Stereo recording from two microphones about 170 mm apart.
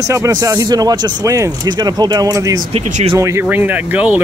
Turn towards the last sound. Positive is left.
turn(degrees=-10)  # may be behind; listen again after turning